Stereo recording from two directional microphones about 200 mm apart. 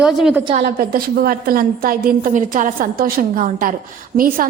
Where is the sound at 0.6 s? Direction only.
50° right (ahead or behind).